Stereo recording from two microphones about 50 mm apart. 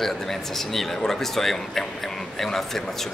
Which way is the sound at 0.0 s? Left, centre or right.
Centre.